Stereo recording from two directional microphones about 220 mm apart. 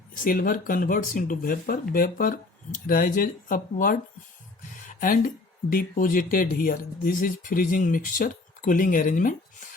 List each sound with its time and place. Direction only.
0.1 s speech: 40° left (ahead or behind)